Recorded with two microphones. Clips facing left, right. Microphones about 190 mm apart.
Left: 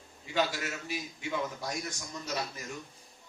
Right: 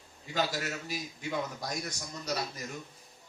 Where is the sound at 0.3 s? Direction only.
40° right (ahead or behind).